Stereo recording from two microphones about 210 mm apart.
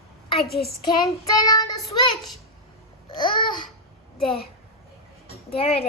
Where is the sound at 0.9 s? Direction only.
20° left (ahead or behind).